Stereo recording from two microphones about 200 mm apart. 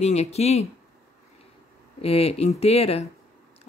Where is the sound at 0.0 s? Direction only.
35° left (ahead or behind).